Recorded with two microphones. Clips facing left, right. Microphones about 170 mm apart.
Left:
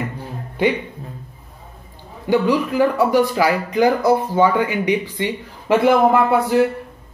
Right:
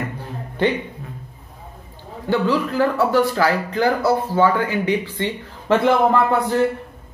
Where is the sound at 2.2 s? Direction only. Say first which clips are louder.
Left 2 dB; 15° left (ahead or behind).